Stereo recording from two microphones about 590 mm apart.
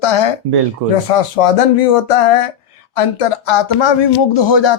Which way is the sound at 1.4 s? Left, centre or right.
Left.